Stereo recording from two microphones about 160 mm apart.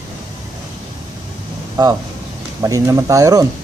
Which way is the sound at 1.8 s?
25° right (ahead or behind).